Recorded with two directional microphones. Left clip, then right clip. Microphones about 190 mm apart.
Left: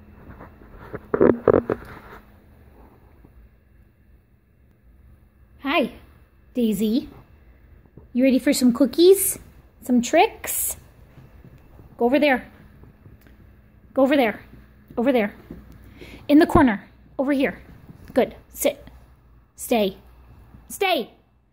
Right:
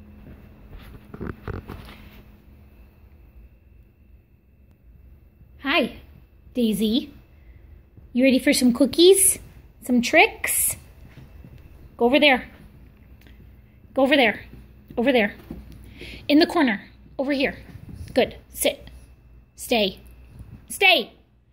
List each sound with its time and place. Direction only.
5.6 s a sound: 15° left (ahead or behind)
6.5 s a woman's voice: 15° left (ahead or behind)
8.1 s a woman's voice: 10° left (ahead or behind)
12.0 s a woman's voice: 15° left (ahead or behind)
13.9 s a woman's voice: 15° left (ahead or behind)
15.0 s a sound: 15° left (ahead or behind)
19.5 s a woman's voice: 25° left (ahead or behind)